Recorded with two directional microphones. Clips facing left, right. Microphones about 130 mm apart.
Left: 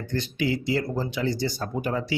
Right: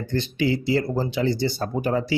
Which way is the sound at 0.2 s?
30° right (ahead or behind).